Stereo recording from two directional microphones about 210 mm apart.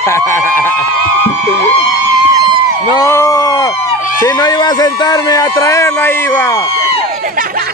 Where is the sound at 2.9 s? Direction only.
15° left (ahead or behind).